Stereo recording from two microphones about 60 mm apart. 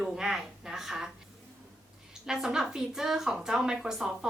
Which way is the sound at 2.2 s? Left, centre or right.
Centre.